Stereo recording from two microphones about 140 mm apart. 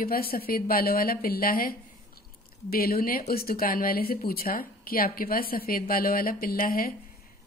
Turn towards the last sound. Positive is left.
turn(degrees=90)